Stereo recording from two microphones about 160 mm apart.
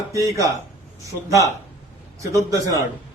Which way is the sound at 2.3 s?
20° right (ahead or behind).